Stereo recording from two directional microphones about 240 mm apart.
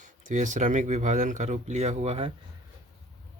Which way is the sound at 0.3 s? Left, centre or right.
Right.